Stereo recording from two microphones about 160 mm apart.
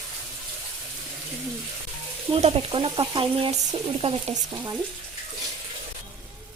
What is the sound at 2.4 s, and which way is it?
Frying, 35° right (ahead or behind).